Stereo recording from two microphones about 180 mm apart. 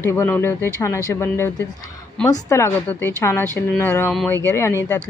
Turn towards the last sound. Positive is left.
turn(degrees=15)  # may be behind; listen again after turning